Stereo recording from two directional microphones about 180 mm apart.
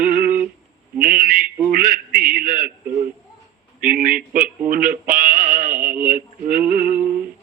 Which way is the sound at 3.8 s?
50° right (ahead or behind).